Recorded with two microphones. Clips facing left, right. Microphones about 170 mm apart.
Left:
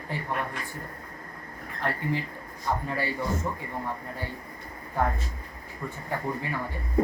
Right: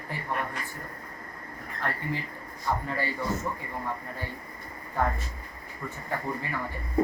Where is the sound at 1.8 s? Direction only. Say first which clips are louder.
Left 3 dB; 20° left (ahead or behind).